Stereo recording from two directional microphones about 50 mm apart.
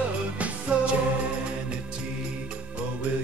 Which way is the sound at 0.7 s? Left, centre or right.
Right.